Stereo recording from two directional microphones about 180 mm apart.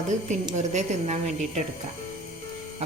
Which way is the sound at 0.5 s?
40° right (ahead or behind).